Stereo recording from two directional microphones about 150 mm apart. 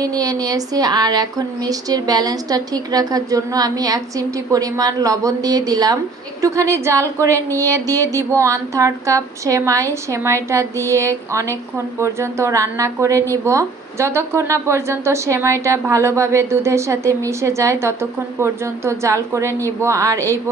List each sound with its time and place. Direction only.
0.0 s a woman's voice: 25° right (ahead or behind)